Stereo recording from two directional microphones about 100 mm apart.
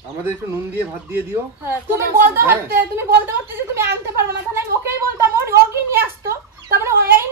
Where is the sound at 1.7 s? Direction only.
25° right (ahead or behind).